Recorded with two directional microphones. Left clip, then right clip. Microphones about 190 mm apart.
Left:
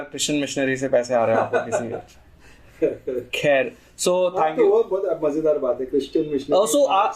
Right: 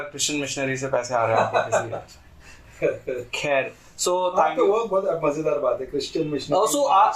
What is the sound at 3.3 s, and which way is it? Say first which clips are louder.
A man's voice: left 4 dB; 40° left (ahead or behind).